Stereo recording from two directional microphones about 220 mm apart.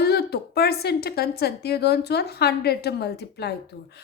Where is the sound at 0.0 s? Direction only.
45° left (ahead or behind).